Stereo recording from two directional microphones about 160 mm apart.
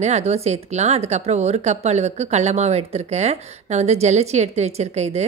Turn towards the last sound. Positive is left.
turn(degrees=-45)  # may be behind; listen again after turning